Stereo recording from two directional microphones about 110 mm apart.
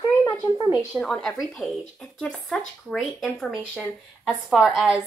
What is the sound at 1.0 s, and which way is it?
Speech, 5° left (ahead or behind).